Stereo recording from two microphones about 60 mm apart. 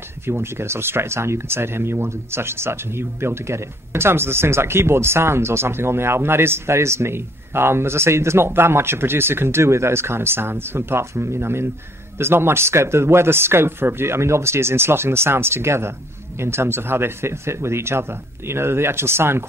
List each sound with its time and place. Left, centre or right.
0.3 s speech: right